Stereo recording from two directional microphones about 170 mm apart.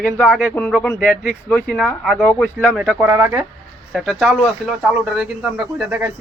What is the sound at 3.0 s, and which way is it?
Speech, 15° right (ahead or behind).